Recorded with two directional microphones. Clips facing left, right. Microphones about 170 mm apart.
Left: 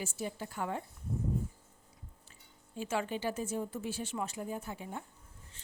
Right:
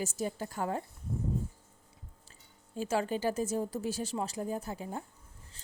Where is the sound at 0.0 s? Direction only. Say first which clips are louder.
Right 4 dB; 40° right (ahead or behind).